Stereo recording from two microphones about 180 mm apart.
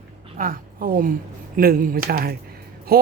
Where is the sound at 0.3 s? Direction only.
50° right (ahead or behind).